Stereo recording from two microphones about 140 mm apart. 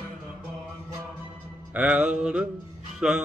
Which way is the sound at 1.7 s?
10° right (ahead or behind).